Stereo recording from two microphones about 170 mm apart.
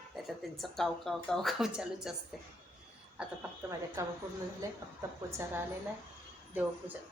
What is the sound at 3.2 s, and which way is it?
Speech, 5° right (ahead or behind).